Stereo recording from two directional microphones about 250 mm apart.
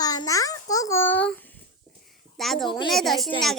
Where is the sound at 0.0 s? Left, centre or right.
Centre.